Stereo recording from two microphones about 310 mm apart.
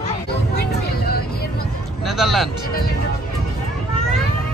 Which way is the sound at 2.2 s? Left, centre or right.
Centre.